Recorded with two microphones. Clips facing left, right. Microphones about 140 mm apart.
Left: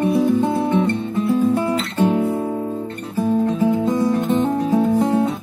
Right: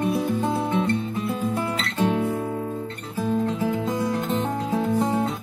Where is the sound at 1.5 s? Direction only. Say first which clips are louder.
Left 6 dB; 10° left (ahead or behind).